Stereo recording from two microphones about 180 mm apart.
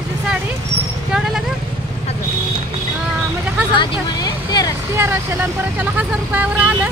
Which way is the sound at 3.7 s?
25° left (ahead or behind).